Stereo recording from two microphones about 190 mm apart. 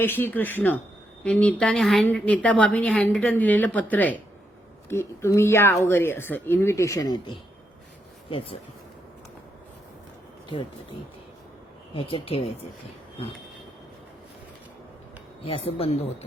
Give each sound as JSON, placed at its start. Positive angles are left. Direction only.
{"t": 0.0, "sound": "a woman's voice", "side_deg": 10}
{"t": 11.9, "sound": "speech", "side_deg": 30}
{"t": 15.5, "sound": "speech", "side_deg": 30}